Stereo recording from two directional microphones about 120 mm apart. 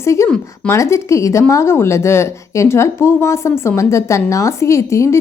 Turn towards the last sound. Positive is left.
turn(degrees=25)  # may be behind; listen again after turning